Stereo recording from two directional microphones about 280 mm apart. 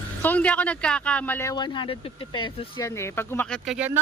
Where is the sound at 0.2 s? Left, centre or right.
Centre.